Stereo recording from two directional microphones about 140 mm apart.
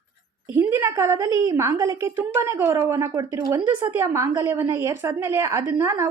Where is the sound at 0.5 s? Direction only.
20° right (ahead or behind).